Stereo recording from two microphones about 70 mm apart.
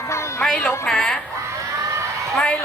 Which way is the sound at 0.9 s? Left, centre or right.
Centre.